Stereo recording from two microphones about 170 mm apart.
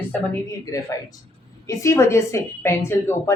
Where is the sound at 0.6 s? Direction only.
20° left (ahead or behind).